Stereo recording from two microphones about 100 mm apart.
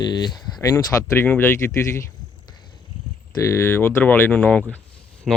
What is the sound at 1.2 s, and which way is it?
Speech, 20° left (ahead or behind).